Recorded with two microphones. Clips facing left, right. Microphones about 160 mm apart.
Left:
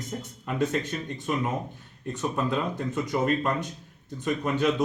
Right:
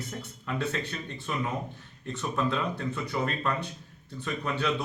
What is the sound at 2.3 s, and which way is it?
Speech, 15° left (ahead or behind).